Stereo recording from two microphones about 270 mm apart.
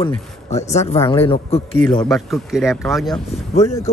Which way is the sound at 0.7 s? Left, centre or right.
Left.